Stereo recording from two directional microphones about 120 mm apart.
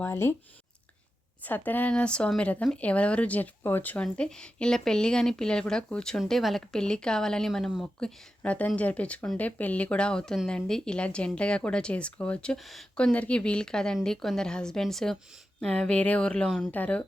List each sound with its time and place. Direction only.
0.0 s speech: 20° left (ahead or behind)
1.5 s a woman's voice: 15° left (ahead or behind)